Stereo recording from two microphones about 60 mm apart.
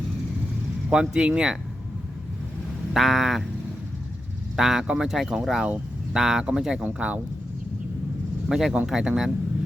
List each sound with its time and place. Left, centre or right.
0.9 s speech: centre
2.9 s vehicle: centre
4.5 s speech: centre; by 7.2 s right
8.4 s speech: centre